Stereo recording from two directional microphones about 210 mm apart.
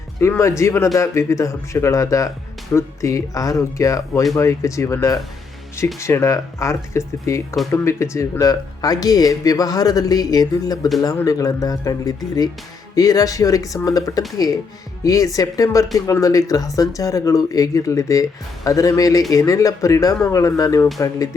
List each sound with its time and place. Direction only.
0.2 s speech: 15° left (ahead or behind)